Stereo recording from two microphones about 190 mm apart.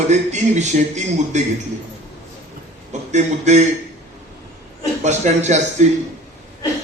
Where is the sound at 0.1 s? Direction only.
35° right (ahead or behind).